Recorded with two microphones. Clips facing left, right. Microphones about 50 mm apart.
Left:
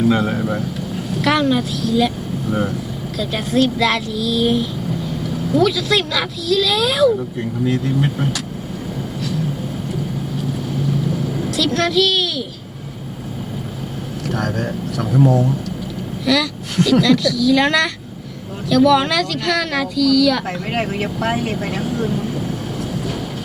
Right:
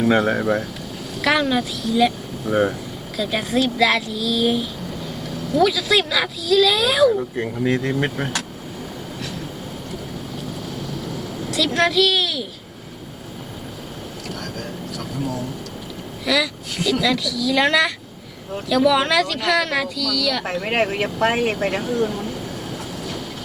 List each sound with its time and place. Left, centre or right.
0.1 s speech: right
1.2 s a woman's voice: centre
2.5 s speech: right
3.2 s a woman's voice: centre
7.6 s speech: right
11.5 s a child's voice: centre
16.2 s a woman's voice: centre
20.7 s speech: right